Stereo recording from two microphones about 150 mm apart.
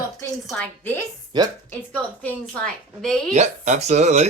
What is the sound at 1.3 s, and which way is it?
Speech, 30° right (ahead or behind).